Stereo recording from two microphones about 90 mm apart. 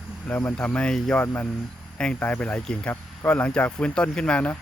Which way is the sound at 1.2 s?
20° left (ahead or behind).